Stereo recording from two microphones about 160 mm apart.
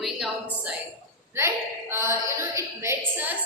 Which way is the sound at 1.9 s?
15° right (ahead or behind).